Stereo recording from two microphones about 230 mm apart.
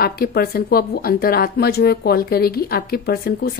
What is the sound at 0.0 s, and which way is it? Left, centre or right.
Speech, left.